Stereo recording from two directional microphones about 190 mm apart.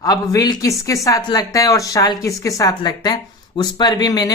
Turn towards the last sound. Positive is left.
turn(degrees=20)  # may be behind; listen again after turning